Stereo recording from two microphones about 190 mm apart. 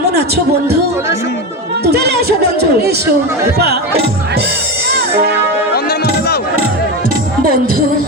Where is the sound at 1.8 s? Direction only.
60° right (ahead or behind).